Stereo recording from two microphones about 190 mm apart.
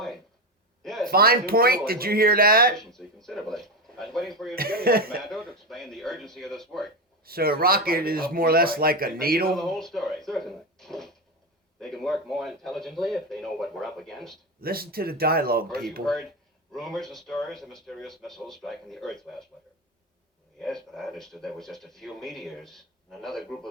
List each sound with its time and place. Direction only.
0.8 s a sound: centre (ahead or behind)
1.1 s speech: 50° right (ahead or behind)
2.7 s a sound: centre (ahead or behind)
4.5 s speech: 50° right (ahead or behind)
5.2 s speech: centre (ahead or behind)
7.3 s speech: 50° right (ahead or behind)
9.6 s speech: centre (ahead or behind)
14.6 s speech: 50° right (ahead or behind)
16.7 s speech: centre (ahead or behind)
20.6 s speech: centre (ahead or behind)